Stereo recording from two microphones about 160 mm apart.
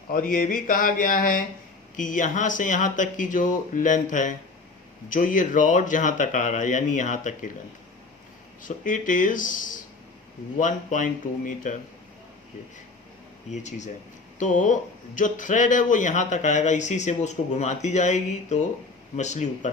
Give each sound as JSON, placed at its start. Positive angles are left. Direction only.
{"t": 0.1, "sound": "speech", "side_deg": 60}
{"t": 8.6, "sound": "speech", "side_deg": 55}
{"t": 13.5, "sound": "speech", "side_deg": 45}